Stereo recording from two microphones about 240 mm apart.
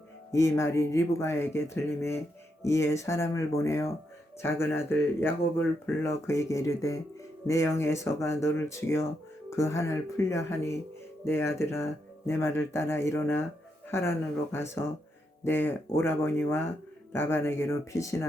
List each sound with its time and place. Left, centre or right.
0.3 s speech: centre